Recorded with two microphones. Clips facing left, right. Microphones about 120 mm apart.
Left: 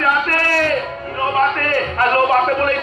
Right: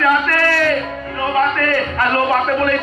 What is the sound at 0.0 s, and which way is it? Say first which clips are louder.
Music: right 2 dB; 40° left (ahead or behind).